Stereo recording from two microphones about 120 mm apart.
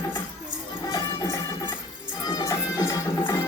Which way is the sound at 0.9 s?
30° left (ahead or behind).